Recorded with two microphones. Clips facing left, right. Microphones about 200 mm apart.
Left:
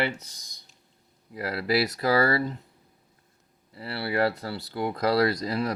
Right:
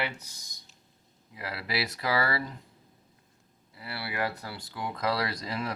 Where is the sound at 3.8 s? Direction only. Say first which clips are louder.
Left 8 dB; 35° left (ahead or behind).